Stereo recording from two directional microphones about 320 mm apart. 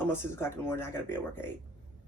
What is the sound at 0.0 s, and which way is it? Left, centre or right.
Speech, centre.